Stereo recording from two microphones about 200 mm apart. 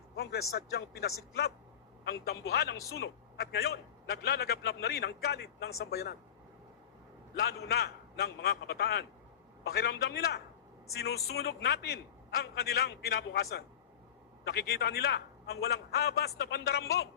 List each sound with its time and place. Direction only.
0.2 s a man's voice: 50° left (ahead or behind)
7.4 s a man's voice: 55° left (ahead or behind)